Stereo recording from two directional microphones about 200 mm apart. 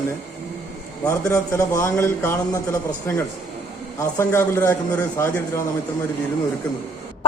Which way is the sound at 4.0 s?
15° left (ahead or behind).